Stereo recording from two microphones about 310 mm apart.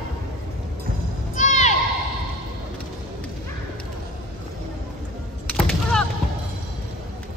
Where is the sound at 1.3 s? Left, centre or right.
Left.